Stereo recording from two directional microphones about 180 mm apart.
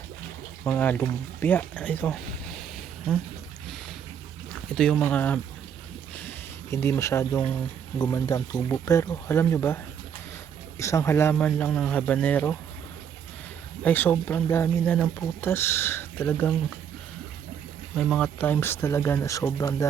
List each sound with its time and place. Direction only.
0.6 s speech: 10° left (ahead or behind)
4.7 s speech: 5° left (ahead or behind)
6.7 s speech: 15° left (ahead or behind)
13.8 s speech: 10° left (ahead or behind)
17.9 s speech: centre (ahead or behind); by 19.9 s 15° left (ahead or behind)